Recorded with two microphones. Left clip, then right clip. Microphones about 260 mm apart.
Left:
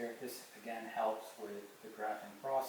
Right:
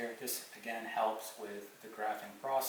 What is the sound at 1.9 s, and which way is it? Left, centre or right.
Speech, centre.